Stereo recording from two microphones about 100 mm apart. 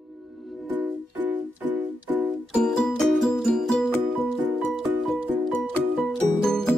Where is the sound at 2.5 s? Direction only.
10° left (ahead or behind).